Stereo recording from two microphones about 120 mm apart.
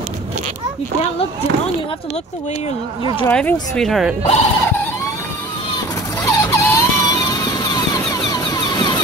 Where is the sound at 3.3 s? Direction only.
5° left (ahead or behind).